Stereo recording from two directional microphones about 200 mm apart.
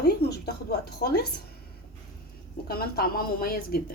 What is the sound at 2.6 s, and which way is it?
A woman's voice, 50° left (ahead or behind).